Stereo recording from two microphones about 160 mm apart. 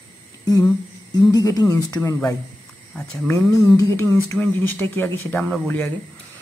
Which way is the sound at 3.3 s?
15° left (ahead or behind).